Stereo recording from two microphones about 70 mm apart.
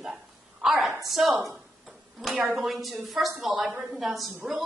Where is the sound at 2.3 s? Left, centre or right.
Right.